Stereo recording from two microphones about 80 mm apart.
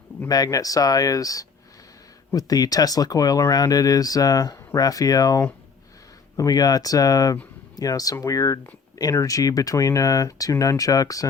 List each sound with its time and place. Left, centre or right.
0.3 s speech: left